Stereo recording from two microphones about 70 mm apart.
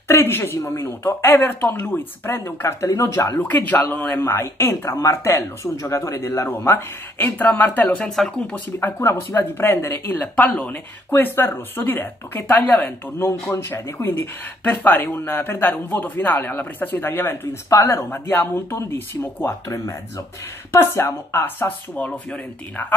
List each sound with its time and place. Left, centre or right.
0.1 s speech: left
2.9 s speech: left
3.4 s speech: left
6.7 s speech: left
8.0 s speech: centre
8.7 s speech: left
11.1 s speech: left
13.2 s speech: left
14.6 s speech: left
20.7 s speech: left